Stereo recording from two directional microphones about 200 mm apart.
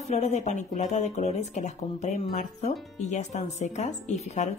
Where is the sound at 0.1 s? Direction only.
35° left (ahead or behind).